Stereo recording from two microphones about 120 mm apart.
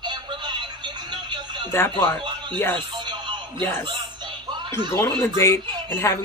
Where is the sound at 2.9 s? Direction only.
40° right (ahead or behind).